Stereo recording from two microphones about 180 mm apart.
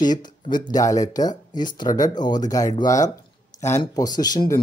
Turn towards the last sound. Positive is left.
turn(degrees=20)  # may be behind; listen again after turning